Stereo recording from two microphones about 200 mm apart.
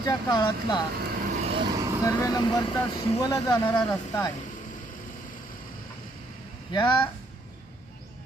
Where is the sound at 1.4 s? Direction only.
25° right (ahead or behind).